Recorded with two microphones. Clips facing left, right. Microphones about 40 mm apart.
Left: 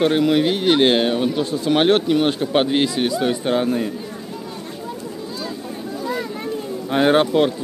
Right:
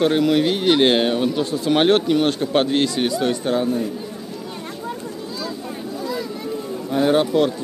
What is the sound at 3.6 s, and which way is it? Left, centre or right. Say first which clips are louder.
Speech: left 1 dB; left.